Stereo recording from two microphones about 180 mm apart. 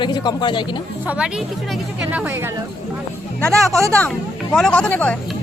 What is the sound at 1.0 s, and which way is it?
A woman's voice, 5° right (ahead or behind).